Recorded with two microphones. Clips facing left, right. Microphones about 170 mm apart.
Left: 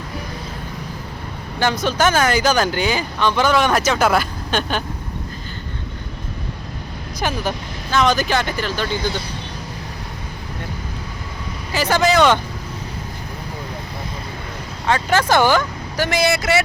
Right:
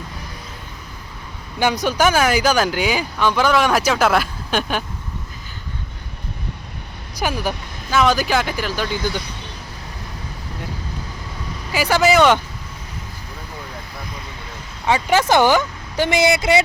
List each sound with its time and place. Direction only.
1.5 s speech: 15° right (ahead or behind)
7.2 s speech: 10° right (ahead or behind)
11.7 s speech: 10° right (ahead or behind)
14.8 s speech: 10° right (ahead or behind)